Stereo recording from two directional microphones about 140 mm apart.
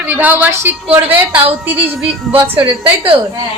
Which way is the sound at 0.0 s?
15° right (ahead or behind).